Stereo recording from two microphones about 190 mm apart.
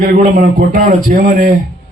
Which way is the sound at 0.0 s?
45° right (ahead or behind).